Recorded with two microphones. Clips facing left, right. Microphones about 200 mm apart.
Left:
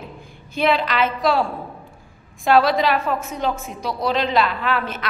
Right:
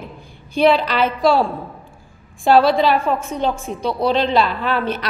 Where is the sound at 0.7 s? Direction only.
30° right (ahead or behind).